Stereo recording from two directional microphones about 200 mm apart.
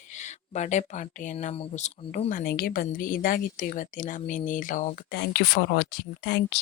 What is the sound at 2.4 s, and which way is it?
A woman's voice, 50° left (ahead or behind).